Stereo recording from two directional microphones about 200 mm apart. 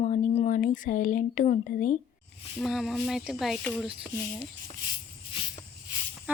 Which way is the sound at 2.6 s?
Centre (ahead or behind).